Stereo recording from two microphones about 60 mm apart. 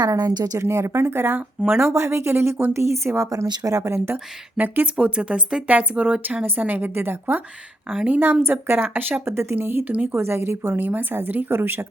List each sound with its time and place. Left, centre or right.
0.0 s speech: right
0.6 s speech: right
1.9 s speech: right
3.3 s speech: right
3.8 s speech: right
4.5 s speech: right
7.9 s speech: right
8.2 s speech: right
10.8 s speech: right